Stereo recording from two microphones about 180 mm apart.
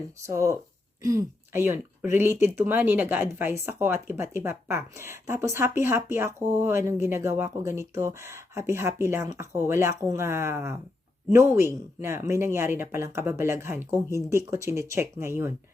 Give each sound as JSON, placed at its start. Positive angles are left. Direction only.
{"t": 0.3, "sound": "speech", "side_deg": -15}